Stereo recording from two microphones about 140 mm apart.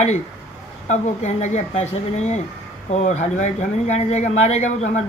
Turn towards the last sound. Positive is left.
turn(degrees=55)  # may be behind; listen again after turning